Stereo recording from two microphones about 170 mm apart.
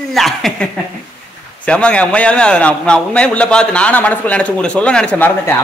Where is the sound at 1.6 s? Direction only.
5° left (ahead or behind).